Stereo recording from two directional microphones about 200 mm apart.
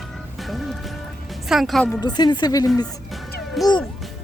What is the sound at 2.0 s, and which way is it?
Speech, 20° left (ahead or behind).